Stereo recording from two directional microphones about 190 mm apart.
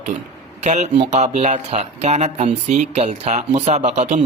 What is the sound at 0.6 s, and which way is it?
Speech, 35° right (ahead or behind).